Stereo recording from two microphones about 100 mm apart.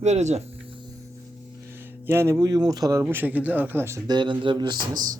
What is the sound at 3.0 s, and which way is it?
Speech, 20° right (ahead or behind).